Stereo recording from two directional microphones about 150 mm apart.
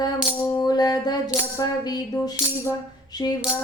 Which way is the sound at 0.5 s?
25° left (ahead or behind).